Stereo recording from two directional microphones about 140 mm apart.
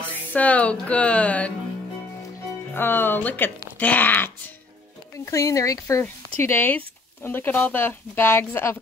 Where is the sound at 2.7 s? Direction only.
15° left (ahead or behind).